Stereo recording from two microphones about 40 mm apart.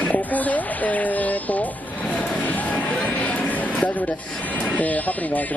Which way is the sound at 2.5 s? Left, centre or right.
Left.